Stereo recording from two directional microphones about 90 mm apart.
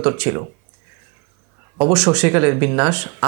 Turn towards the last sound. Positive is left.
turn(degrees=-20)  # may be behind; listen again after turning